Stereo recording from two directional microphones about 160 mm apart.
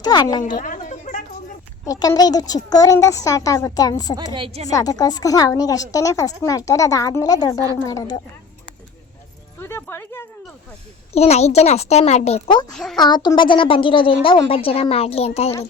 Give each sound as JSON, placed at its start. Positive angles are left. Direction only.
{"t": 0.0, "sound": "a woman's voice", "side_deg": 25}
{"t": 0.5, "sound": "a sound", "side_deg": 55}
{"t": 1.8, "sound": "a woman's voice", "side_deg": 20}
{"t": 4.3, "sound": "a woman's voice", "side_deg": -30}
{"t": 4.7, "sound": "a woman's voice", "side_deg": 25}
{"t": 9.6, "sound": "music", "side_deg": 15}
{"t": 11.1, "sound": "a woman's voice", "side_deg": 40}
{"t": 12.7, "sound": "speech", "side_deg": 0}
{"t": 13.0, "sound": "a woman's voice", "side_deg": 25}